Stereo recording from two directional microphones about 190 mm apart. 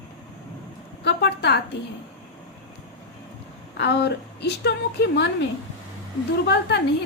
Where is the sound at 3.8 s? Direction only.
65° left (ahead or behind).